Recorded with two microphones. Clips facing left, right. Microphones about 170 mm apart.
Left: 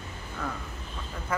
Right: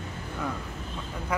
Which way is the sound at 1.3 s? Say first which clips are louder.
Right 1 dB; 15° right (ahead or behind).